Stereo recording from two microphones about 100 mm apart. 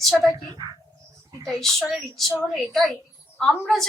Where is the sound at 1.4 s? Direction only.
5° left (ahead or behind).